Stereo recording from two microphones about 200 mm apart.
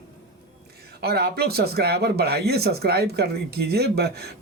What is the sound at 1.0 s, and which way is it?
Speech, 55° right (ahead or behind).